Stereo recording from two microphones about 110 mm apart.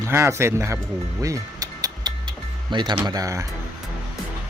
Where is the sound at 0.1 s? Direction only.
25° right (ahead or behind).